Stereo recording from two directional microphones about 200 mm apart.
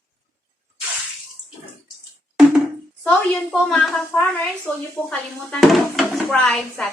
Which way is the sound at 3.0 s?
Centre (ahead or behind).